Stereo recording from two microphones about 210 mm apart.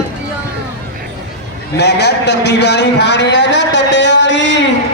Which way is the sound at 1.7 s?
55° left (ahead or behind).